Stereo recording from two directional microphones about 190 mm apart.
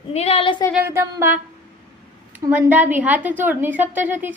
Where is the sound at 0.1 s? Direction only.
35° left (ahead or behind).